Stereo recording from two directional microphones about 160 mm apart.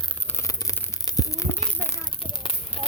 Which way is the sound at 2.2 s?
35° left (ahead or behind).